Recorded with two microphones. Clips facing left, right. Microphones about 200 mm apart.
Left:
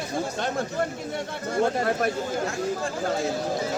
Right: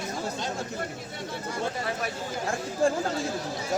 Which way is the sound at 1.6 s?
55° left (ahead or behind).